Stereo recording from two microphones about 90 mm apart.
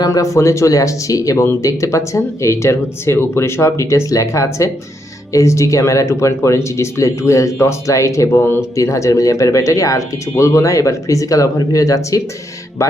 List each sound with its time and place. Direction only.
0.0 s speech: 40° left (ahead or behind)
8.8 s speech: 35° left (ahead or behind)